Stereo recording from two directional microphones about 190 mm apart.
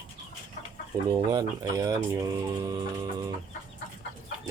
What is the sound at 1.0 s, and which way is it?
Speech, 20° right (ahead or behind).